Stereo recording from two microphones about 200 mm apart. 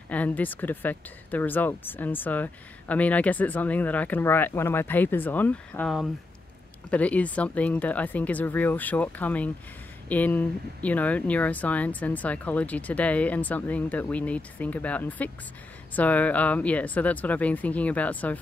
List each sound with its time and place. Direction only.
0.1 s speech: 10° left (ahead or behind)